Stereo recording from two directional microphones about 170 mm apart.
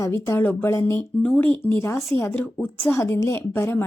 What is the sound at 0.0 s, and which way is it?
A woman's voice, 15° left (ahead or behind).